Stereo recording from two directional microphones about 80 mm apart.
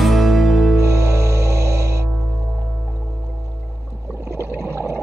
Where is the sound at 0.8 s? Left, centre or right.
Right.